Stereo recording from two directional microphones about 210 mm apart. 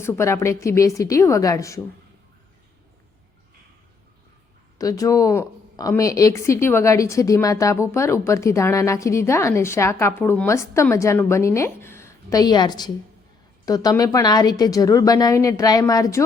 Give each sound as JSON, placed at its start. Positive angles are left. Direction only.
{"t": 0.0, "sound": "a woman's voice", "side_deg": 15}
{"t": 4.8, "sound": "a woman's voice", "side_deg": 15}